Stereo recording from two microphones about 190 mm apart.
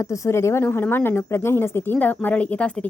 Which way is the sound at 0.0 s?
15° left (ahead or behind).